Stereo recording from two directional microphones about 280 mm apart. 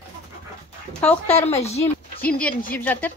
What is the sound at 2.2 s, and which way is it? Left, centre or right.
Speech, centre.